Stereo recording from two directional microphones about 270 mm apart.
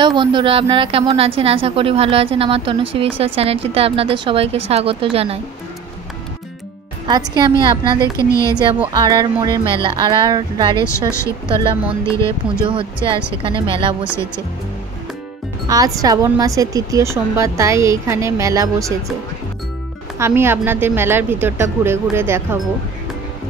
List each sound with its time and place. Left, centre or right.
0.0 s a woman's voice: centre
7.1 s a woman's voice: centre
8.2 s a woman's voice: centre
8.9 s a woman's voice: centre
10.8 s a woman's voice: centre
12.6 s a woman's voice: centre
15.7 s a woman's voice: centre
20.2 s a woman's voice: centre